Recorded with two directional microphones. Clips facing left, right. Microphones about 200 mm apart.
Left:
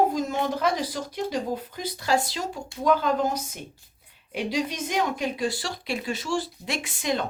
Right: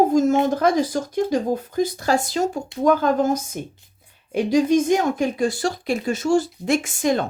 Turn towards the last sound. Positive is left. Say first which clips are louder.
# right 8 dB
turn(degrees=-45)  # may be behind; listen again after turning